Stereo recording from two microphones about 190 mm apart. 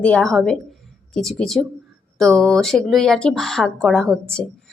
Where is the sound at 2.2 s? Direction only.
Centre (ahead or behind).